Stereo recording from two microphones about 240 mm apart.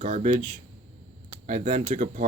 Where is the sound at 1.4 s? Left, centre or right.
Right.